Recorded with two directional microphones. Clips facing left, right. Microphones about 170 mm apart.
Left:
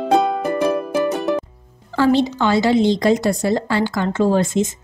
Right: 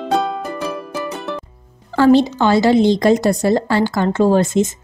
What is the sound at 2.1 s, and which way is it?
Speech, 40° right (ahead or behind).